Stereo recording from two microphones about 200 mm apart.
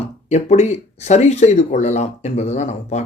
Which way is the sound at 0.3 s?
35° left (ahead or behind).